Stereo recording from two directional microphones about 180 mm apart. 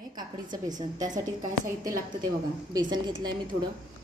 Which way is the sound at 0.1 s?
20° right (ahead or behind).